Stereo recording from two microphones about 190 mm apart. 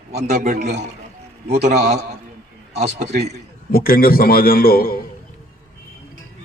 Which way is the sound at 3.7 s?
50° left (ahead or behind).